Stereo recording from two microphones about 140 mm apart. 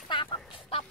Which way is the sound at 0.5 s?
40° left (ahead or behind).